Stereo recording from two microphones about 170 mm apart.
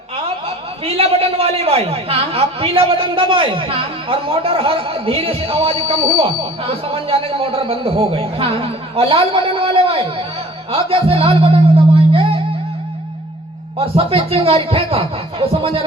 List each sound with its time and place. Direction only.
0.4 s a man's voice: 35° right (ahead or behind)
13.7 s a man's voice: 35° right (ahead or behind)